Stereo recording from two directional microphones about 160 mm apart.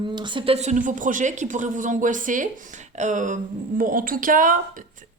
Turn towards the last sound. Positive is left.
turn(degrees=-55)  # may be behind; listen again after turning